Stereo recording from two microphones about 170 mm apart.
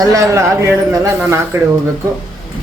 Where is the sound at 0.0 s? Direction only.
20° right (ahead or behind).